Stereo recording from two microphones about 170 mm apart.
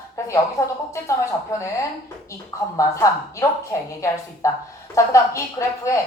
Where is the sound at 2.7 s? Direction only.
20° left (ahead or behind).